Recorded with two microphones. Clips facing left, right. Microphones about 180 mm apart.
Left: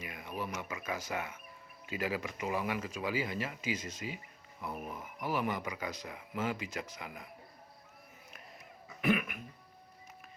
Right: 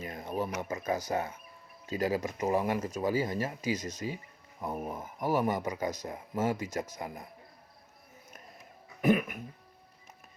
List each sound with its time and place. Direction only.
0.0 s a sound: 45° right (ahead or behind)
0.6 s speech: 40° right (ahead or behind)
9.0 s music: 40° right (ahead or behind)